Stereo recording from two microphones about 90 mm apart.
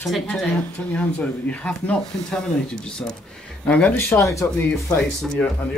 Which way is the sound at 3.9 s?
35° left (ahead or behind).